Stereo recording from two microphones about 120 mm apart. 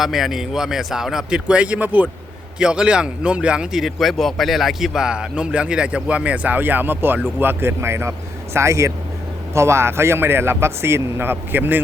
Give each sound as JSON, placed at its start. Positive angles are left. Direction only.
{"t": 0.0, "sound": "a man's voice", "side_deg": -5}